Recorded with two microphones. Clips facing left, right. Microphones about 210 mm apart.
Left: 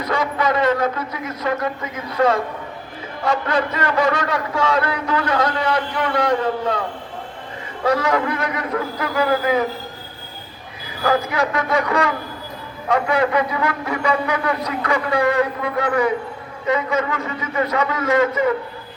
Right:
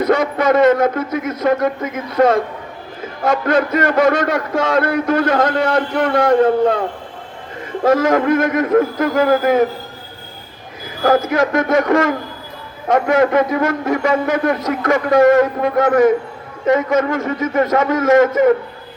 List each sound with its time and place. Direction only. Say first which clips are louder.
0.0 s a man's voice: right 6 dB; 45° right (ahead or behind)
7.9 s a man's voice: right 6 dB; 45° right (ahead or behind)
11.0 s a man's voice: right 5 dB; 45° right (ahead or behind)